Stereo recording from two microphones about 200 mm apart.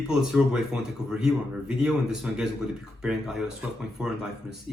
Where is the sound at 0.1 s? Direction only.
5° right (ahead or behind).